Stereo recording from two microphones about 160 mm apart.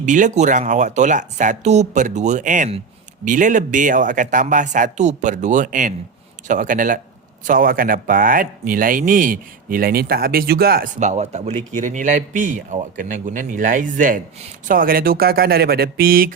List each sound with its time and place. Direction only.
0.0 s speech: 50° right (ahead or behind); by 10.8 s 75° right (ahead or behind)
11.0 s speech: 45° right (ahead or behind); by 16.3 s 70° right (ahead or behind)